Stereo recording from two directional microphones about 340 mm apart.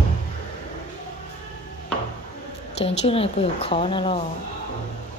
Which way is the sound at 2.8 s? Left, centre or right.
Centre.